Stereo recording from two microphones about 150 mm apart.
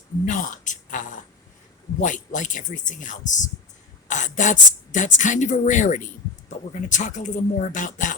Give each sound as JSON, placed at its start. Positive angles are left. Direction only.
{"t": 0.3, "sound": "speech", "side_deg": 60}